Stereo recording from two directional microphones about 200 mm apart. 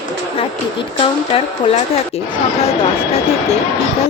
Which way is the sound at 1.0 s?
30° left (ahead or behind).